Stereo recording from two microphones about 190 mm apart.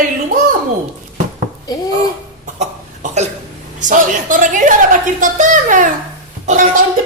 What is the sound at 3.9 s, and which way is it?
A woman's voice, 40° right (ahead or behind).